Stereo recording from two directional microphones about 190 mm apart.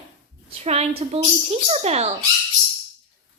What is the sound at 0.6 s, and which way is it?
A woman's voice, 35° right (ahead or behind).